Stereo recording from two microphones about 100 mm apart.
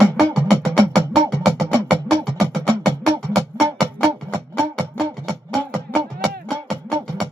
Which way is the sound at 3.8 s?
80° right.